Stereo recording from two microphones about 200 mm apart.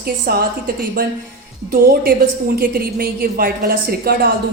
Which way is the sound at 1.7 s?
50° right (ahead or behind).